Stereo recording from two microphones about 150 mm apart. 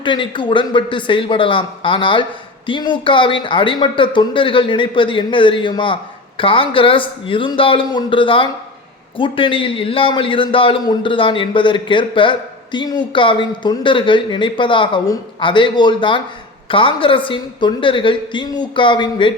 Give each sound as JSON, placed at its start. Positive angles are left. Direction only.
{"t": 0.0, "sound": "a man's voice", "side_deg": 30}